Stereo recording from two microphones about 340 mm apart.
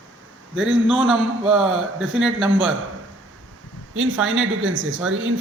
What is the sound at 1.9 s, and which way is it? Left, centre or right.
Speech, right.